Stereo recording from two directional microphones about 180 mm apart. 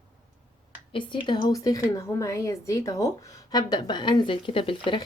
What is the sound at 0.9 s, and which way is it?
Speech, 25° left (ahead or behind).